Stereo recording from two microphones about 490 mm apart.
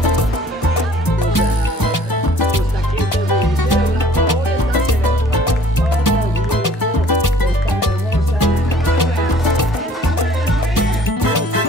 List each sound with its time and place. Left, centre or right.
2.5 s music: left
6.0 s music: left